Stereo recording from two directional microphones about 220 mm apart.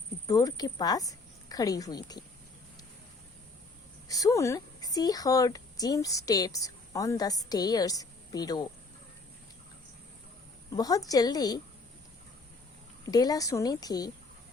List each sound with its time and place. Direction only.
0.3 s a woman's voice: 15° left (ahead or behind)
4.1 s a woman's voice: 15° left (ahead or behind)
10.7 s a woman's voice: 15° left (ahead or behind)
13.1 s a woman's voice: 15° left (ahead or behind)